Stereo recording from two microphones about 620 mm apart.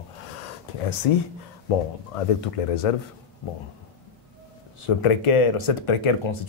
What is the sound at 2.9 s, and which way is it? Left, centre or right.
Speech, left.